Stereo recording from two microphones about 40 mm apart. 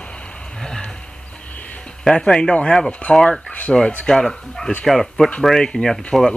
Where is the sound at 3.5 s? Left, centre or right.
Left.